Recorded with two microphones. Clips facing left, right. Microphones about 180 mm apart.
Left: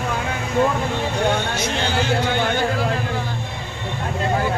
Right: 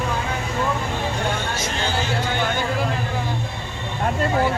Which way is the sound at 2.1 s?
50° left (ahead or behind).